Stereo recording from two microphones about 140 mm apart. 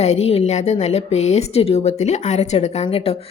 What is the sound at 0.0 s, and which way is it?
A woman's voice, 50° left (ahead or behind).